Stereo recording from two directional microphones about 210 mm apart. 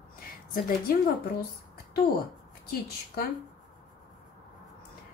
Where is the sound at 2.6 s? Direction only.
45° left (ahead or behind).